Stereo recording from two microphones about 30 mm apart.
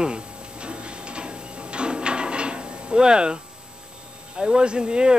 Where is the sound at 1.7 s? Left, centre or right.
Right.